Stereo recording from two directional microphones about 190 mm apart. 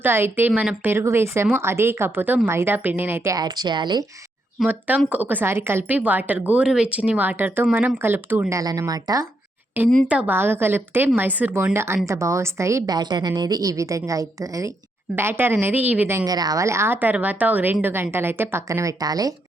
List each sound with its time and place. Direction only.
0.0 s a woman's voice: 10° right (ahead or behind)
4.6 s a woman's voice: 5° right (ahead or behind)
10.1 s a woman's voice: 10° right (ahead or behind)